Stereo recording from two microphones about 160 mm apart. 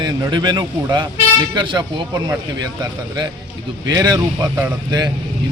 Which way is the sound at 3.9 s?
25° right (ahead or behind).